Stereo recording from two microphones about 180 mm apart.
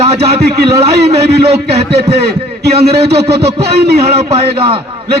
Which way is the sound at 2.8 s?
60° right (ahead or behind).